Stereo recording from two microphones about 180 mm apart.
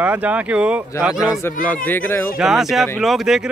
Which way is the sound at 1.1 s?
20° left (ahead or behind).